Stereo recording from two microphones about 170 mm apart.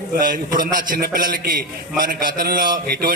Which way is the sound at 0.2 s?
55° right (ahead or behind).